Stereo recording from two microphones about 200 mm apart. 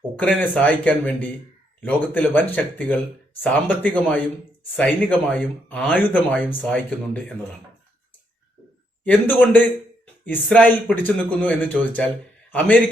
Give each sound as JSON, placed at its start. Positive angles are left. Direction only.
{"t": 0.2, "sound": "speech", "side_deg": 5}
{"t": 9.0, "sound": "a man's voice", "side_deg": 10}